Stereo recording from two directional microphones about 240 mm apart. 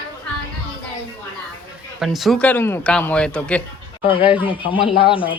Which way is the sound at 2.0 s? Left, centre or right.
Centre.